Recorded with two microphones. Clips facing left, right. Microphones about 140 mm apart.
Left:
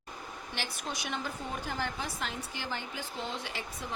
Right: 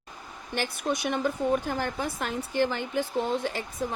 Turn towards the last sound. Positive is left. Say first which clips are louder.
# right 10 dB
turn(degrees=-45)  # may be behind; listen again after turning